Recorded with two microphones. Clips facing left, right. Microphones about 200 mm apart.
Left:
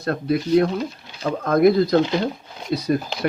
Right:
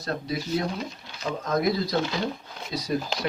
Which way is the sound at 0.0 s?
55° left (ahead or behind).